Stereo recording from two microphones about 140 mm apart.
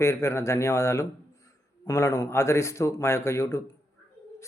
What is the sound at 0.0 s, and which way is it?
Speech, 20° left (ahead or behind).